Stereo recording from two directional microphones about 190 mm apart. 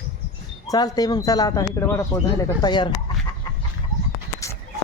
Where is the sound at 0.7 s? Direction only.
20° left (ahead or behind).